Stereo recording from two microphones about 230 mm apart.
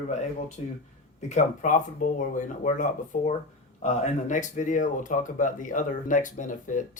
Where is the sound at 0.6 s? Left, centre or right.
Left.